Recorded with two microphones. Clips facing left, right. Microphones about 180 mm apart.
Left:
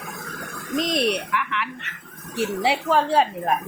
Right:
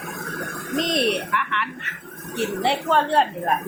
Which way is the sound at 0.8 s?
Centre (ahead or behind).